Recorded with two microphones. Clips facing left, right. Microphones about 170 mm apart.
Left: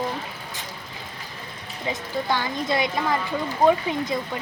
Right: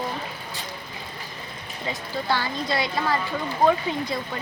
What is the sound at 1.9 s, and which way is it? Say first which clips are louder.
A woman's voice: left 1 dB; 20° left (ahead or behind).